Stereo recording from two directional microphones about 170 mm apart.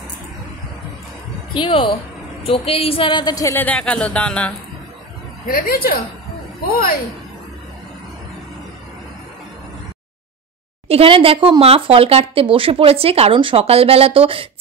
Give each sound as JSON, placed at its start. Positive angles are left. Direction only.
{"t": 1.5, "sound": "a woman's voice", "side_deg": 30}
{"t": 5.5, "sound": "a woman's voice", "side_deg": 60}
{"t": 10.9, "sound": "speech", "side_deg": -35}